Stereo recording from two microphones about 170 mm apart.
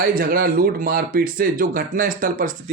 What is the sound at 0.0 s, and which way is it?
Speech, 60° right (ahead or behind).